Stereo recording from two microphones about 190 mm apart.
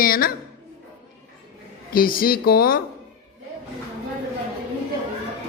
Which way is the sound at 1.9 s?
50° left (ahead or behind).